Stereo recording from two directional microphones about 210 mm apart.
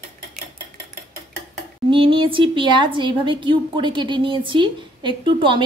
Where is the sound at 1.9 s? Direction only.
25° right (ahead or behind).